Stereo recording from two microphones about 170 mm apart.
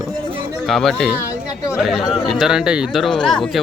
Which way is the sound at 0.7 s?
Centre (ahead or behind).